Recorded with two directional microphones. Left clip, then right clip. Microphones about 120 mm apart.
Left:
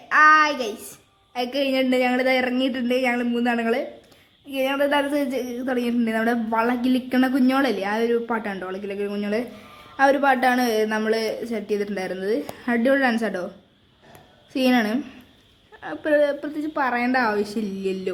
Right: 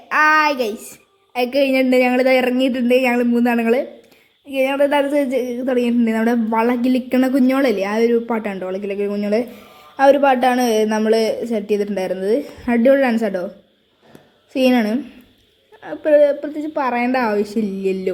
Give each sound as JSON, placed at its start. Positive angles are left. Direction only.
{"t": 0.1, "sound": "child singing", "side_deg": -25}
{"t": 1.3, "sound": "a woman's voice", "side_deg": -30}
{"t": 14.5, "sound": "speech", "side_deg": -15}
{"t": 14.9, "sound": "a woman's voice", "side_deg": 0}